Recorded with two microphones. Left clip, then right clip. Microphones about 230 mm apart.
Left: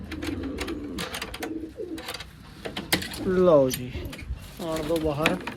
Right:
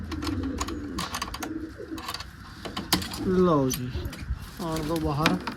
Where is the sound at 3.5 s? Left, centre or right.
Centre.